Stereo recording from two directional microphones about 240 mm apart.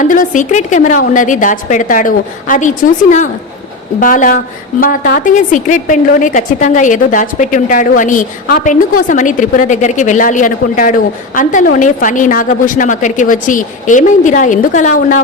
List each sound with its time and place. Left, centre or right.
0.0 s a woman's voice: left